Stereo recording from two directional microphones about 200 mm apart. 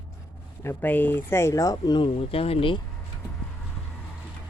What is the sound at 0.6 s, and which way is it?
Speech, 10° left (ahead or behind).